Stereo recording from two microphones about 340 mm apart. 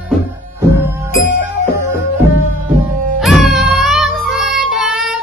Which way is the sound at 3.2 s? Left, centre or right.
Centre.